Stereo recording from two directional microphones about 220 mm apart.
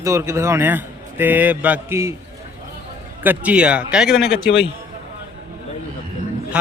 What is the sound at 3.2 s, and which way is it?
A man's voice, 5° right (ahead or behind).